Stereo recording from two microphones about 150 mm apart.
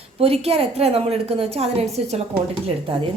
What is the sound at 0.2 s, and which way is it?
A woman's voice, 40° right (ahead or behind).